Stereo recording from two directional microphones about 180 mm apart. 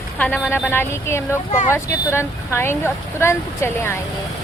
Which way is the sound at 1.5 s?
45° left (ahead or behind).